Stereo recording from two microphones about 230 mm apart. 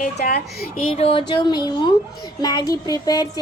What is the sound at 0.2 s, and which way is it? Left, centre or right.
Speech, left.